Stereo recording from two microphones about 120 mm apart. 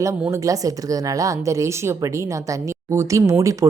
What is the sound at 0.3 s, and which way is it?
Speech, 30° right (ahead or behind).